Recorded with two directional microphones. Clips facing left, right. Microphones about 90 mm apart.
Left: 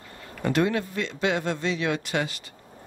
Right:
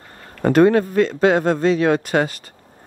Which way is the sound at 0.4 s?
45° right (ahead or behind).